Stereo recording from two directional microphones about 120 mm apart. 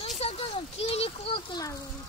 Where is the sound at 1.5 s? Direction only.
30° left (ahead or behind).